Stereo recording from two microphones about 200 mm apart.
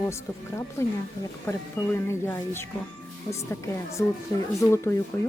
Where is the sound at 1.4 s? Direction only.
10° left (ahead or behind).